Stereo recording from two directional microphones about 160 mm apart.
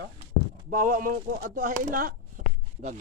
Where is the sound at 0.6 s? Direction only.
55° right (ahead or behind).